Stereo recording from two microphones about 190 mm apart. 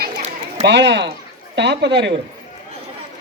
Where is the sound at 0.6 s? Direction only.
65° right (ahead or behind).